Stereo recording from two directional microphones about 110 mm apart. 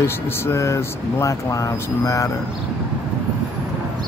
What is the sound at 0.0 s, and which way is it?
Speech, 25° left (ahead or behind).